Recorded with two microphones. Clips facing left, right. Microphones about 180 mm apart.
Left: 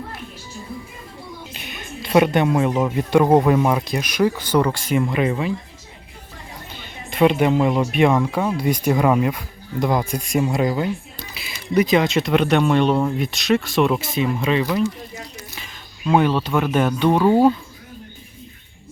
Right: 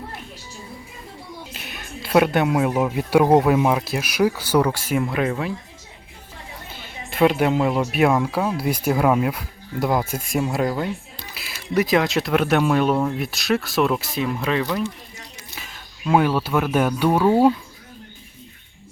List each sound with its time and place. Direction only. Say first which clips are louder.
1.5 s speech: left 2 dB; centre (ahead or behind)
6.7 s speech: left 1 dB; 5° right (ahead or behind)